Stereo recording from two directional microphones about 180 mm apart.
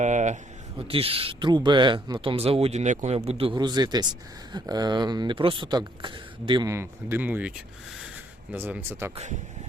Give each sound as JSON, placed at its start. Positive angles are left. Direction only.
{"t": 0.0, "sound": "speech", "side_deg": -40}
{"t": 0.8, "sound": "speech", "side_deg": -30}
{"t": 8.5, "sound": "speech", "side_deg": -10}